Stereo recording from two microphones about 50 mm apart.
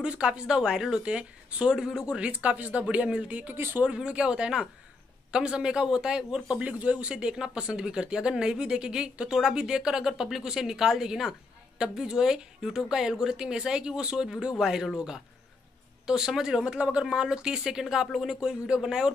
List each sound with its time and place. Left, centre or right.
0.0 s a man's voice: centre
2.3 s speech: right
3.5 s speech: right
3.8 s a man's voice: right
16.1 s a man's voice: centre
17.0 s a man's voice: centre